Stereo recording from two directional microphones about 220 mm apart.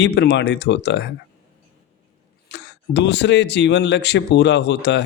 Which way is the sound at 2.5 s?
50° left (ahead or behind).